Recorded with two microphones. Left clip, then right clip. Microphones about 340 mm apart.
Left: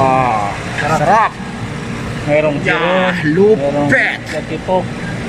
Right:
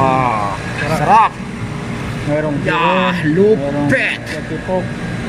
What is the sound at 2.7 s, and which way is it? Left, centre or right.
Speech, centre.